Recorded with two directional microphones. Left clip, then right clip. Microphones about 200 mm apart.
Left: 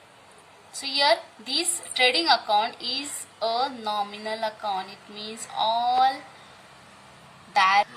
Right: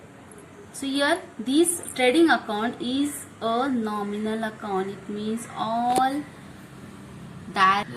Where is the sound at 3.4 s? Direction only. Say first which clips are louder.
Right 1 dB; 25° left (ahead or behind).